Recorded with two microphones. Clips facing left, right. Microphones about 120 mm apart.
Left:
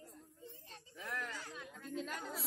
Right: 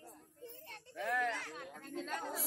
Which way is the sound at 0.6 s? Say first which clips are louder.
Right 9 dB; 70° right (ahead or behind).